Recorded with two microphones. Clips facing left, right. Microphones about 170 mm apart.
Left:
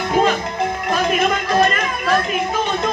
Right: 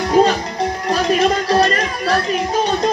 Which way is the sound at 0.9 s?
35° right (ahead or behind).